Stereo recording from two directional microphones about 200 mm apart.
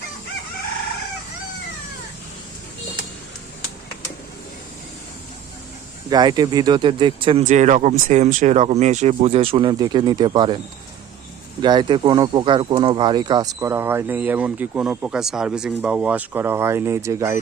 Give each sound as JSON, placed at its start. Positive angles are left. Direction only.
{"t": 6.1, "sound": "speech", "side_deg": -20}
{"t": 11.6, "sound": "speech", "side_deg": -20}